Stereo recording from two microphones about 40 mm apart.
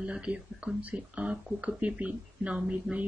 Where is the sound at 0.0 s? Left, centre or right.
Right.